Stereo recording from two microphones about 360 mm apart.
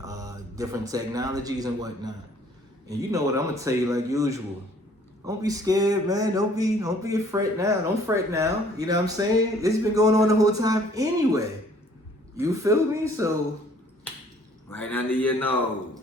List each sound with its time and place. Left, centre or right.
0.0 s speech: centre
3.1 s speech: centre
14.7 s speech: centre